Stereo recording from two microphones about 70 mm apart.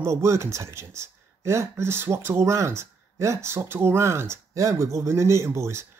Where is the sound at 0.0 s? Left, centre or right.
Right.